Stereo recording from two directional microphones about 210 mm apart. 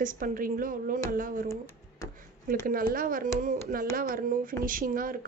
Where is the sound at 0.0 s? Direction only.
40° right (ahead or behind).